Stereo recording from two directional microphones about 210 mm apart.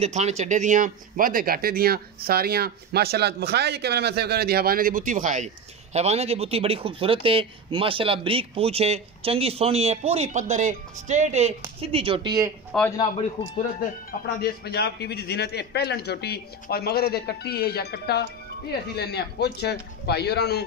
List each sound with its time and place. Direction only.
0.0 s speech: 30° right (ahead or behind)
12.7 s a man's voice: centre (ahead or behind)
14.4 s a man's voice: 50° left (ahead or behind)